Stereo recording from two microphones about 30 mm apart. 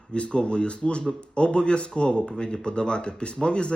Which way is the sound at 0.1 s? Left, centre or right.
Left.